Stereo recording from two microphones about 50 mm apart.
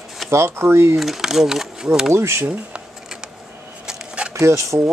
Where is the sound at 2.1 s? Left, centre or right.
Right.